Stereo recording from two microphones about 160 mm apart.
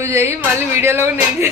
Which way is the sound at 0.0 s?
15° right (ahead or behind).